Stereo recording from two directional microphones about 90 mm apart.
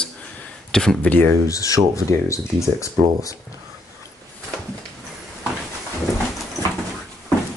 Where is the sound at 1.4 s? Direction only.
40° left (ahead or behind).